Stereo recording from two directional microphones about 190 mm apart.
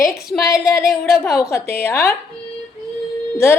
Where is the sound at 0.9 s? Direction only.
Centre (ahead or behind).